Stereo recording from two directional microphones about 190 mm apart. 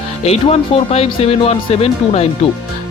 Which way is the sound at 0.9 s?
30° left (ahead or behind).